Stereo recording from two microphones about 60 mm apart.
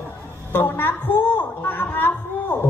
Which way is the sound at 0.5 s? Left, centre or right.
Left.